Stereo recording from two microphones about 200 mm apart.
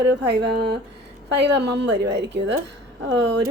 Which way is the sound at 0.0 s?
55° right (ahead or behind).